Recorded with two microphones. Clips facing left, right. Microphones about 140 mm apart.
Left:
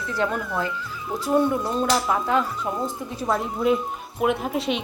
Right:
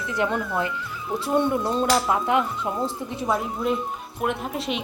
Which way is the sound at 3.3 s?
Centre (ahead or behind).